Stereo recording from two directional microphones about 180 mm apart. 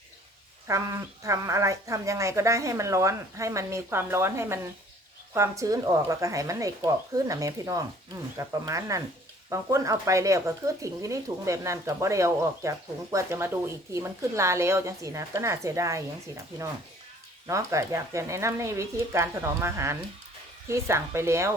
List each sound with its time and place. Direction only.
0.7 s speech: 15° right (ahead or behind)
17.4 s speech: 15° right (ahead or behind)